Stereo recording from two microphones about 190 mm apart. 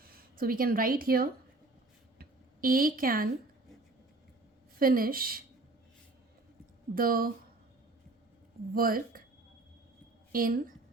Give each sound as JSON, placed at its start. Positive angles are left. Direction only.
{"t": 0.0, "sound": "a woman's voice", "side_deg": -50}
{"t": 2.1, "sound": "a sound", "side_deg": -50}
{"t": 4.8, "sound": "a woman's voice", "side_deg": -50}
{"t": 6.9, "sound": "a woman's voice", "side_deg": -50}
{"t": 8.7, "sound": "a woman's voice", "side_deg": -50}
{"t": 10.3, "sound": "a woman's voice", "side_deg": -50}